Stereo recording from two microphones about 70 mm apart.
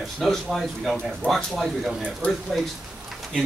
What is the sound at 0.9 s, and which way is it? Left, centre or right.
Speech, centre.